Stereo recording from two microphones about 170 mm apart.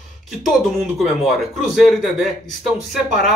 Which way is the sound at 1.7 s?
Centre (ahead or behind).